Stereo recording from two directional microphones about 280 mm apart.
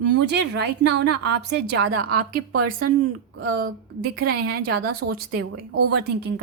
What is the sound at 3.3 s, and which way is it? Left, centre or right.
Speech, right.